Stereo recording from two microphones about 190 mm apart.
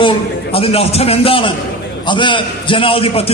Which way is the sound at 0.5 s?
30° left (ahead or behind).